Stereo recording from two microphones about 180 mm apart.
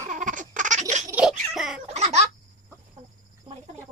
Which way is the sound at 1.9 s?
35° right (ahead or behind).